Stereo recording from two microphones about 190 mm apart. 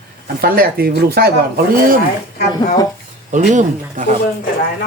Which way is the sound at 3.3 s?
40° right (ahead or behind).